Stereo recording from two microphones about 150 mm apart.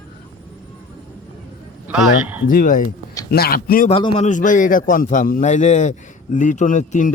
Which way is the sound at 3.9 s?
35° left (ahead or behind).